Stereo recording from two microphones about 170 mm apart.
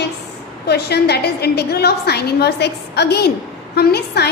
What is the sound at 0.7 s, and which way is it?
A woman's voice, 75° left (ahead or behind).